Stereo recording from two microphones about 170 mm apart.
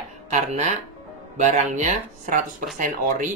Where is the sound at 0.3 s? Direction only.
45° right (ahead or behind).